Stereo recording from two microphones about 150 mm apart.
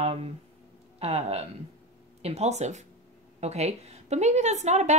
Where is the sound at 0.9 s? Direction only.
45° right (ahead or behind).